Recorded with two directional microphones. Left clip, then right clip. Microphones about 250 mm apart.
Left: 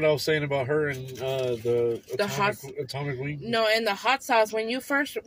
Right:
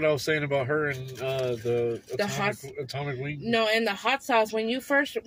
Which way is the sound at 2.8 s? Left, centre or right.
Centre.